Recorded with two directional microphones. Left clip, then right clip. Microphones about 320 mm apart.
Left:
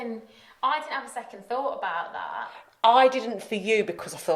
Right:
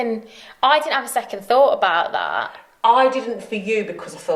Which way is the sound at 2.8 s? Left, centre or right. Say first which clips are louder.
Right 3 dB; left.